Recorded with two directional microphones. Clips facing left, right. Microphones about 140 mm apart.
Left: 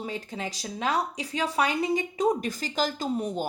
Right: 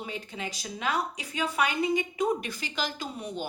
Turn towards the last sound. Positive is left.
turn(degrees=40)  # may be behind; listen again after turning